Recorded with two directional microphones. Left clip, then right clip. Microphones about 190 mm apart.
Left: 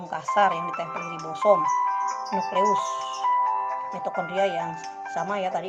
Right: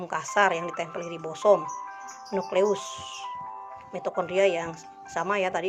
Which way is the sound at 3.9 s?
5° right (ahead or behind).